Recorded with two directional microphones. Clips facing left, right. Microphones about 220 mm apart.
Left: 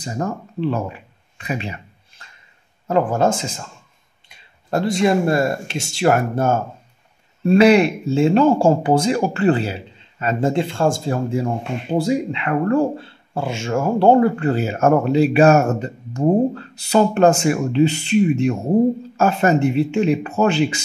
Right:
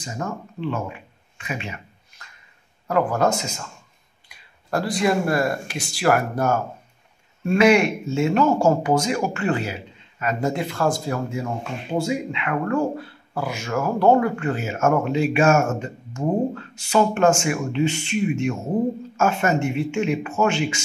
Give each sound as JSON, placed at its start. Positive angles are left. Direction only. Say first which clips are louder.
{"t": 0.0, "sound": "speech", "louder": "left 5 dB", "side_deg": 35}
{"t": 1.4, "sound": "a sound", "louder": "left 5 dB", "side_deg": 35}
{"t": 2.9, "sound": "speech", "louder": "left 3 dB", "side_deg": 25}